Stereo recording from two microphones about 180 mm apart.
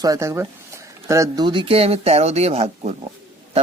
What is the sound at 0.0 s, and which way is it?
Speech, 20° right (ahead or behind).